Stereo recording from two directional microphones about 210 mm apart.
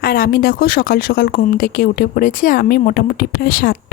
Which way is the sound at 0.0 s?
45° left (ahead or behind).